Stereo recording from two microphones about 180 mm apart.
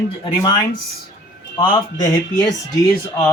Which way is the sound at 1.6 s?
25° left (ahead or behind).